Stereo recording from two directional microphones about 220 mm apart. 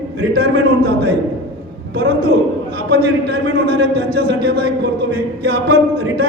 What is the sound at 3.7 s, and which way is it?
Speech, 50° right (ahead or behind).